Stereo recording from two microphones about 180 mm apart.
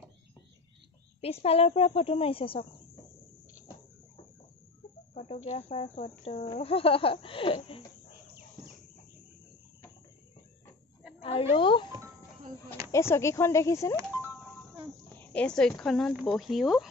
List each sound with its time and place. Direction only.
1.2 s speech: 35° left (ahead or behind)
5.1 s speech: 35° left (ahead or behind)
11.1 s a sound: 35° left (ahead or behind)
11.5 s speech: 30° left (ahead or behind)
12.9 s speech: 15° left (ahead or behind)
15.3 s speech: 5° left (ahead or behind)